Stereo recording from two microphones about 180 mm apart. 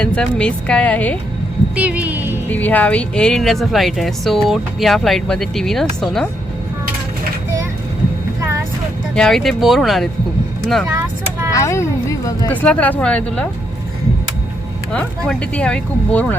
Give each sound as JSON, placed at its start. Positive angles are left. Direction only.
{"t": 0.0, "sound": "speech", "side_deg": 5}
{"t": 1.7, "sound": "speech", "side_deg": -10}
{"t": 2.5, "sound": "speech", "side_deg": 10}
{"t": 9.1, "sound": "speech", "side_deg": 5}
{"t": 11.5, "sound": "speech", "side_deg": 15}
{"t": 12.5, "sound": "speech", "side_deg": 5}
{"t": 14.9, "sound": "speech", "side_deg": 5}